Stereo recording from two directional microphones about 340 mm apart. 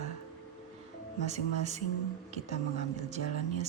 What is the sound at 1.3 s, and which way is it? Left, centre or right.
Speech, centre.